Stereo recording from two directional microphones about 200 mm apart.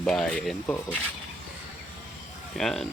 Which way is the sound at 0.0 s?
5° left (ahead or behind).